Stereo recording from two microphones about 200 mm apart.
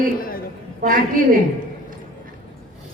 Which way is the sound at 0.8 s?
45° right (ahead or behind).